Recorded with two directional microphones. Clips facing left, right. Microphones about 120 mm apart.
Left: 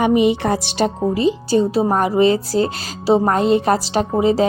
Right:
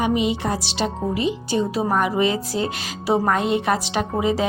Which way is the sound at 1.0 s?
35° left (ahead or behind).